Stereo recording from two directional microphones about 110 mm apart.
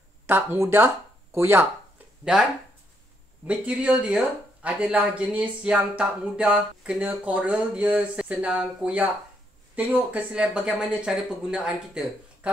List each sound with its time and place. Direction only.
0.3 s speech: 20° right (ahead or behind)
2.3 s speech: 5° right (ahead or behind)